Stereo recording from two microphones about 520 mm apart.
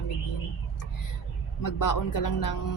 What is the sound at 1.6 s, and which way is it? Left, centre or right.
A woman's voice, left.